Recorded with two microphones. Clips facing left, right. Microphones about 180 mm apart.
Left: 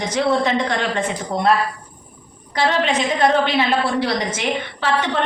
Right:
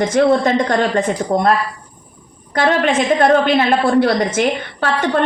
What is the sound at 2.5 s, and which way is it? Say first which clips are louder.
A woman's voice: right 4 dB; 50° right (ahead or behind).